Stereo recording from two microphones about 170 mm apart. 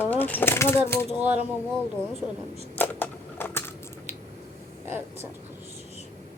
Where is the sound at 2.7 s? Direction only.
10° left (ahead or behind).